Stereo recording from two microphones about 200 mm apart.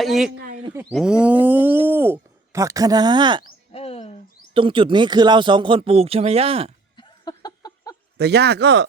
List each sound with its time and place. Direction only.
0.0 s speech: centre (ahead or behind)
0.3 s a sound: 45° right (ahead or behind)
0.7 s speech: 10° right (ahead or behind)
3.7 s bird: 30° left (ahead or behind)
4.5 s speech: 25° right (ahead or behind)
6.9 s a sound: 20° left (ahead or behind)
8.2 s speech: 55° right (ahead or behind)